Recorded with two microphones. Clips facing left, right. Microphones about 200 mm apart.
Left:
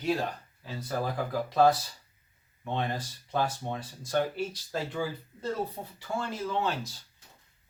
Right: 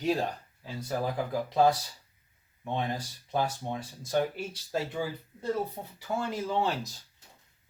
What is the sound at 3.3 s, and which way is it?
Speech, 15° right (ahead or behind).